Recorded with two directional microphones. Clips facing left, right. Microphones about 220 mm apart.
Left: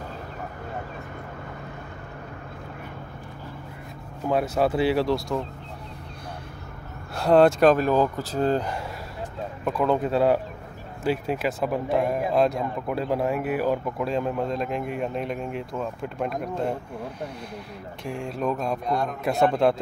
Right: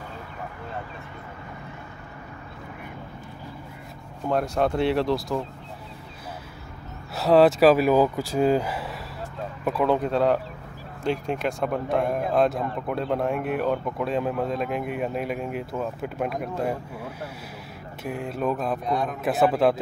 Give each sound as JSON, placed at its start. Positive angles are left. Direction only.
{"t": 4.3, "sound": "speech", "side_deg": 5}
{"t": 7.2, "sound": "speech", "side_deg": 0}